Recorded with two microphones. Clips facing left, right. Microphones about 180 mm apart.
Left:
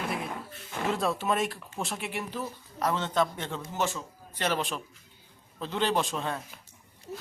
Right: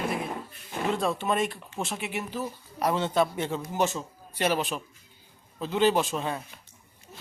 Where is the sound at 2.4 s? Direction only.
15° right (ahead or behind).